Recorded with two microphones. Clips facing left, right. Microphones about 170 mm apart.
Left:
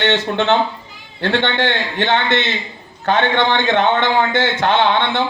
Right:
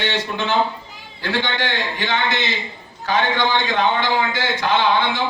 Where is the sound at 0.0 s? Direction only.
70° left (ahead or behind).